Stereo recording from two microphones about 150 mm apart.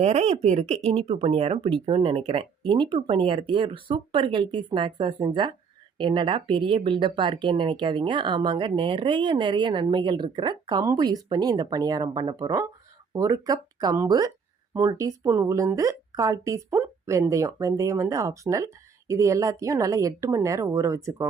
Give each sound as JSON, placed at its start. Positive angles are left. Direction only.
{"t": 0.0, "sound": "speech", "side_deg": -50}